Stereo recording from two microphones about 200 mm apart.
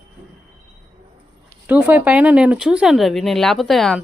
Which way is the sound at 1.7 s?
10° right (ahead or behind).